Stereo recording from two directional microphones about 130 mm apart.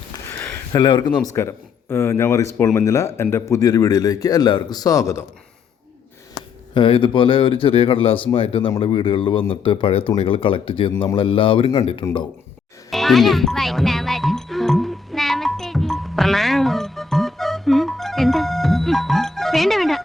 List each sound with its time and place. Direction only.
0.3 s a sound: 15° left (ahead or behind)
0.7 s a man's voice: 35° left (ahead or behind)
6.7 s speech: 40° left (ahead or behind)
12.9 s music: centre (ahead or behind)